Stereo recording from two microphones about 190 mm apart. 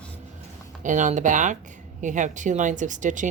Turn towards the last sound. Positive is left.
turn(degrees=-40)  # may be behind; listen again after turning